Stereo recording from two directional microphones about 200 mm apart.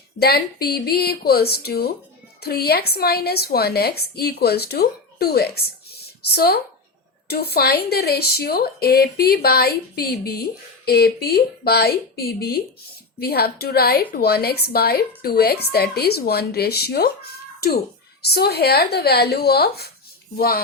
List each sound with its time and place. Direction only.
0.2 s a woman's voice: 50° left (ahead or behind)
18.2 s a woman's voice: 55° left (ahead or behind)